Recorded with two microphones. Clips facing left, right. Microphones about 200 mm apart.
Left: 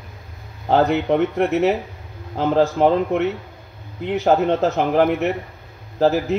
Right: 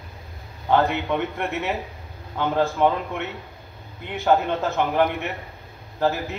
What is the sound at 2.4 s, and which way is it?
Speech, 35° left (ahead or behind).